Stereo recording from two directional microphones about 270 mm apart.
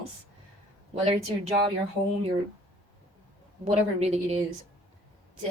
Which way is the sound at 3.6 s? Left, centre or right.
Right.